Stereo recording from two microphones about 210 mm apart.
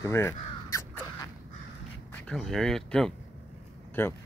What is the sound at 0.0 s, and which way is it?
Crow, 10° left (ahead or behind).